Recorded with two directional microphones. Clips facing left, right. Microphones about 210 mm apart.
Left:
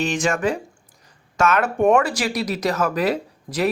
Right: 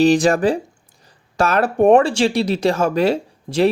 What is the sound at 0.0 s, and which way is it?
Speech, 35° right (ahead or behind).